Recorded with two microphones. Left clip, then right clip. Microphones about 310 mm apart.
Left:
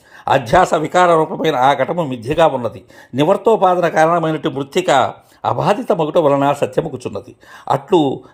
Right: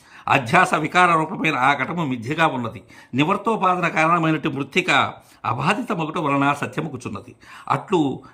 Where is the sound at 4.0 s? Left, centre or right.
Centre.